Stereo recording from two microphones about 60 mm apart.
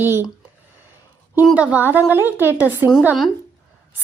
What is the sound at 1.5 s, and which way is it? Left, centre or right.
A woman's voice, right.